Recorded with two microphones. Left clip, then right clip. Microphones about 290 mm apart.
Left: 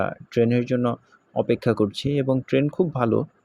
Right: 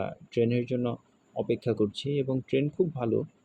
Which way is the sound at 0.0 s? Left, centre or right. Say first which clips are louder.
Left 6 dB; left.